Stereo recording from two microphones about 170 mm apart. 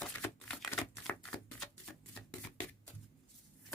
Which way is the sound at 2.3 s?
5° left (ahead or behind).